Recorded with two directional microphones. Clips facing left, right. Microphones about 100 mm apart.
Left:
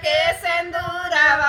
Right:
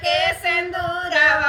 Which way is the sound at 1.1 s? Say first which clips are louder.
Left 1 dB; 25° left (ahead or behind).